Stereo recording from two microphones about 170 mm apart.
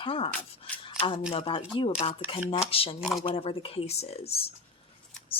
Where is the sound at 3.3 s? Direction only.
30° left (ahead or behind).